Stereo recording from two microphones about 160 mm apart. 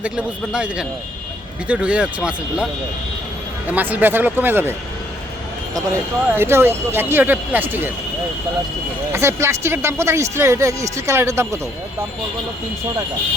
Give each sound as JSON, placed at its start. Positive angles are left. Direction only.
{"t": 0.0, "sound": "speech", "side_deg": -5}
{"t": 3.7, "sound": "speech", "side_deg": -10}
{"t": 5.7, "sound": "speech", "side_deg": -15}
{"t": 9.1, "sound": "speech", "side_deg": -15}